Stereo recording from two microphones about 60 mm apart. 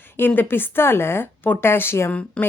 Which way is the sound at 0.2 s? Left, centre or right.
Left.